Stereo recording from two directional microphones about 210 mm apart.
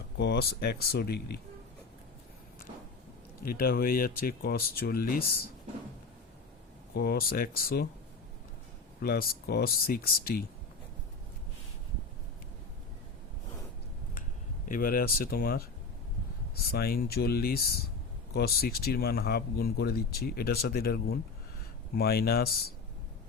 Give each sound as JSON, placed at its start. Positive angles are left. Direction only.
{"t": 0.2, "sound": "speech", "side_deg": 50}
{"t": 3.4, "sound": "speech", "side_deg": 45}
{"t": 6.9, "sound": "speech", "side_deg": 50}
{"t": 9.0, "sound": "speech", "side_deg": 45}
{"t": 14.7, "sound": "speech", "side_deg": 45}
{"t": 16.7, "sound": "speech", "side_deg": 45}